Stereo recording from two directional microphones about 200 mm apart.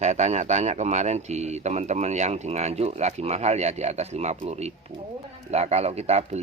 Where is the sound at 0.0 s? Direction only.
35° right (ahead or behind).